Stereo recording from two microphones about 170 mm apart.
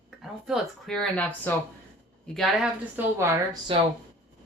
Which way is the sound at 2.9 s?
15° right (ahead or behind).